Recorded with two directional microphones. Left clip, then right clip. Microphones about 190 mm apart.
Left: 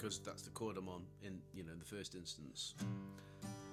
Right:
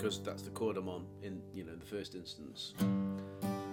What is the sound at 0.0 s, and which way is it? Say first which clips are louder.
Speech: right 9 dB; 15° left (ahead or behind).